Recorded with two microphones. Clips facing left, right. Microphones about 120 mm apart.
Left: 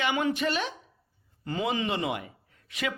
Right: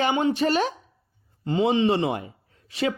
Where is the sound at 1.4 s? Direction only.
25° right (ahead or behind).